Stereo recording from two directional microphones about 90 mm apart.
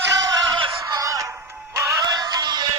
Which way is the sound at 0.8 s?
40° right (ahead or behind).